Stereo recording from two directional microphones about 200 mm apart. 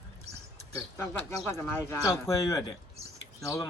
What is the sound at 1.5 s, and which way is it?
Speech, 10° left (ahead or behind).